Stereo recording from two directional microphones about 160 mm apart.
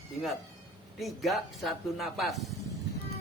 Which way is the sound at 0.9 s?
Centre (ahead or behind).